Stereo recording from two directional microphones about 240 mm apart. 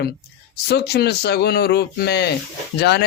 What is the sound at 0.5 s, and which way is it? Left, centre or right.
Speech, left.